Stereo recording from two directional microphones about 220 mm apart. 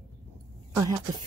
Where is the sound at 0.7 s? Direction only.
15° right (ahead or behind).